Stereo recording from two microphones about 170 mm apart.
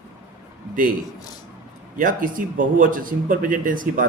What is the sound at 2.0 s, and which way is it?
A man's voice, 50° right (ahead or behind).